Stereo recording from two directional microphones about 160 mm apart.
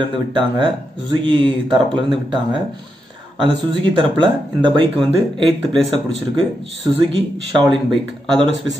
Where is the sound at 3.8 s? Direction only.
30° right (ahead or behind).